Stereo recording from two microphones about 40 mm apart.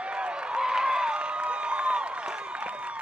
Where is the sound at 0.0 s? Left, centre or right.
Right.